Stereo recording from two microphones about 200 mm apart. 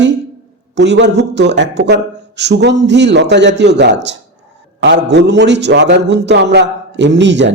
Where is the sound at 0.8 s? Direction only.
60° right (ahead or behind).